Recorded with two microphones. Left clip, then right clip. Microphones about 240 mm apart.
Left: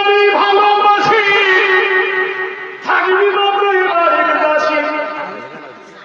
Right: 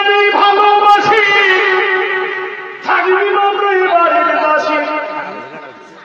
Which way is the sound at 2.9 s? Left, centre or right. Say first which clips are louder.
Even; right.